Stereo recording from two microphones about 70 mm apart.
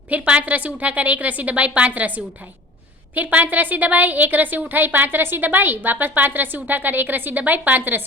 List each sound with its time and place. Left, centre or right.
0.1 s a woman's voice: right